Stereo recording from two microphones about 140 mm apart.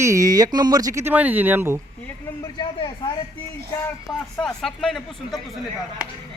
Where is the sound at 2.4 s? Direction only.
30° left (ahead or behind).